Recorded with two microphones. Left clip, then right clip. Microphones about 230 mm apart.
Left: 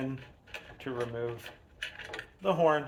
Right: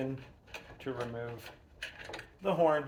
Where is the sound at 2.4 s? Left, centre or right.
Left.